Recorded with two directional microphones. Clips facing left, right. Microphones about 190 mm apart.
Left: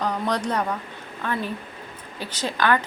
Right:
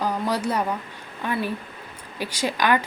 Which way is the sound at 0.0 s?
10° right (ahead or behind).